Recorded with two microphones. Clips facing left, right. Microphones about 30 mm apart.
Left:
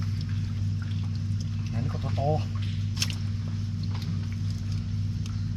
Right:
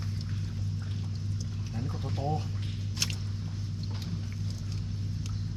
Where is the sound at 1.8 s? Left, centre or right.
Left.